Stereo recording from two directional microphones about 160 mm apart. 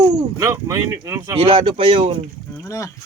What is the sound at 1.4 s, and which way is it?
Speech, 30° right (ahead or behind).